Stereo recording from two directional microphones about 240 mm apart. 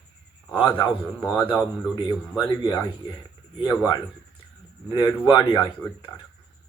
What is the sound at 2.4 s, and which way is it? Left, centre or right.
Speech, centre.